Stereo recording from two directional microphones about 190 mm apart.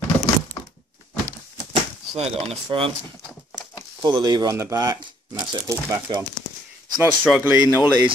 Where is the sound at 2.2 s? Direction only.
30° right (ahead or behind).